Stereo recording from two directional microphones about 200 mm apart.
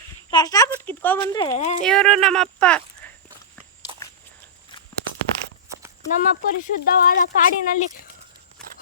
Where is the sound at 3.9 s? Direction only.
25° right (ahead or behind).